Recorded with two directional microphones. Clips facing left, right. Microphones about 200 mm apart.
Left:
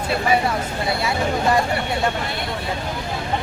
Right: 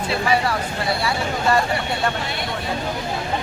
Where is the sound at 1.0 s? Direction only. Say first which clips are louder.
Left 3 dB; 15° left (ahead or behind).